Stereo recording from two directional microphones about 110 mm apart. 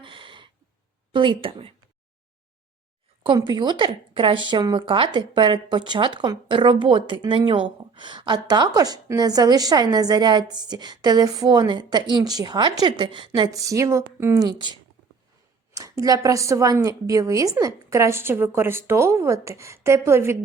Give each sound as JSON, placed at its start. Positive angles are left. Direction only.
{"t": 0.0, "sound": "a sound", "side_deg": -50}
{"t": 1.1, "sound": "a woman's voice", "side_deg": -50}
{"t": 3.3, "sound": "speech", "side_deg": -40}
{"t": 13.5, "sound": "a woman's voice", "side_deg": -30}
{"t": 14.3, "sound": "a woman's voice", "side_deg": -40}